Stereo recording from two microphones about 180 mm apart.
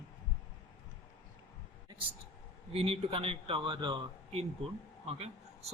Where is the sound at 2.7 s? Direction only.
35° right (ahead or behind).